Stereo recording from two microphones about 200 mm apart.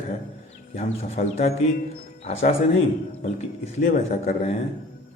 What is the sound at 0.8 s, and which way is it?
A man's voice, 30° left (ahead or behind).